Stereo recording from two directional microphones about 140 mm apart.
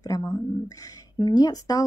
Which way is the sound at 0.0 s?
25° left (ahead or behind).